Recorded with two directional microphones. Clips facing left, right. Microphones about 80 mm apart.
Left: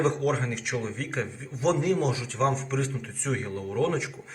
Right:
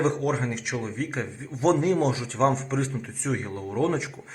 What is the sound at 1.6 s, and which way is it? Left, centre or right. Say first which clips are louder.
Speech: right 3 dB; right.